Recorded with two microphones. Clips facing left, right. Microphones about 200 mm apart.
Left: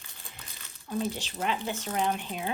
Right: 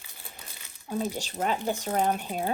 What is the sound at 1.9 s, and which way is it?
Speech, 40° right (ahead or behind).